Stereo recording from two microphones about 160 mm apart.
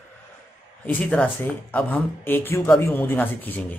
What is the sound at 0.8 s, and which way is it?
A man's voice, 10° left (ahead or behind).